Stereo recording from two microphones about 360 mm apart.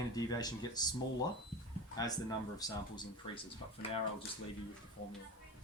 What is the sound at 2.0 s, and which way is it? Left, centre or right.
Speech, centre.